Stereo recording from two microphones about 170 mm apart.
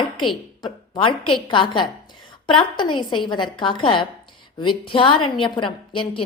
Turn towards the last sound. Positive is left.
turn(degrees=30)  # may be behind; listen again after turning